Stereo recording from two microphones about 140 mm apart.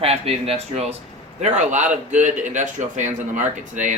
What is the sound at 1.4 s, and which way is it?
Speech, 60° right (ahead or behind).